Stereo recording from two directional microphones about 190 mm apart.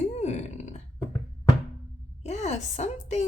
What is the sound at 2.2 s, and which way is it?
A woman's voice, 35° left (ahead or behind).